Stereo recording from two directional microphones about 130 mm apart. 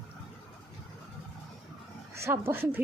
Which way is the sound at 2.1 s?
20° right (ahead or behind).